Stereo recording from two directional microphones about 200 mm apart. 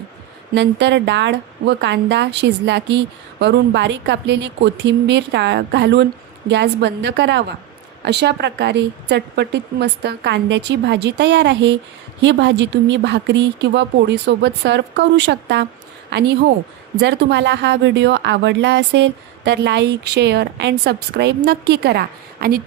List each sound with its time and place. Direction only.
0.5 s a woman's voice: 60° right (ahead or behind)